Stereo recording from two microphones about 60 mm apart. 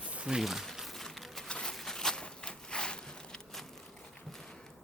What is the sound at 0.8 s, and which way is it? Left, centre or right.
Crumpling, centre.